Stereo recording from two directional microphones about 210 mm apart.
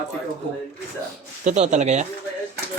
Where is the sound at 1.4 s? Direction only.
35° right (ahead or behind).